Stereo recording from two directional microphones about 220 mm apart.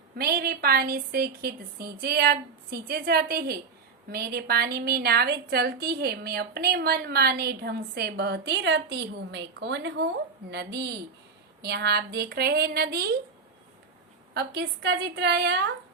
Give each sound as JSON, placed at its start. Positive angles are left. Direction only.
{"t": 0.2, "sound": "a woman's voice", "side_deg": -45}
{"t": 14.3, "sound": "a woman's voice", "side_deg": -50}